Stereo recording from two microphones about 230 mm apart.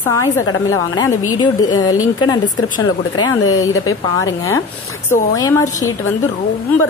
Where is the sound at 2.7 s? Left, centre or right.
Left.